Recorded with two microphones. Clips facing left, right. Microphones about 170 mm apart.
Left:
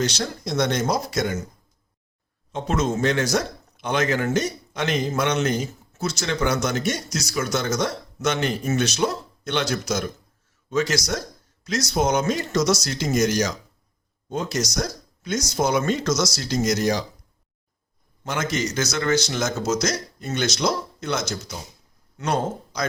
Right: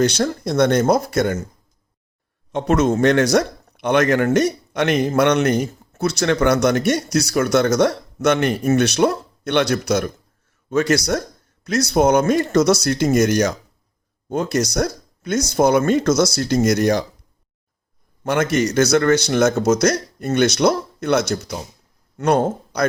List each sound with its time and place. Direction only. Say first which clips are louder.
0.0 s a man's voice: right 7 dB; 55° right (ahead or behind)
2.5 s a man's voice: right 7 dB; 65° right (ahead or behind)
18.2 s a man's voice: right 7 dB; 60° right (ahead or behind)